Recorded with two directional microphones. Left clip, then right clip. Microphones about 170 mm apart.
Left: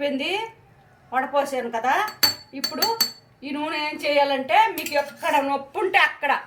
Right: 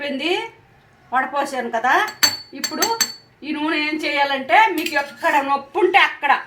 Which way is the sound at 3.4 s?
20° right (ahead or behind).